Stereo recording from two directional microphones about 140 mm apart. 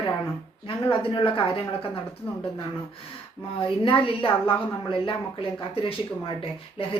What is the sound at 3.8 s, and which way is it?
Speech, 40° left (ahead or behind).